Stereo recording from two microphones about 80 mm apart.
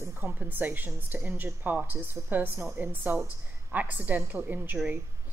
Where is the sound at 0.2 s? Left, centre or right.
Right.